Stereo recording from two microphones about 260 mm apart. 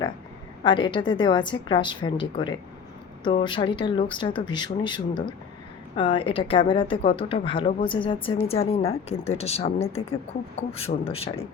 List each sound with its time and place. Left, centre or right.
0.6 s a woman's voice: centre
3.4 s speech: centre